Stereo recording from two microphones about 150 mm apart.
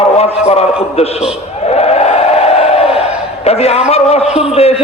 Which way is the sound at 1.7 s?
45° left (ahead or behind).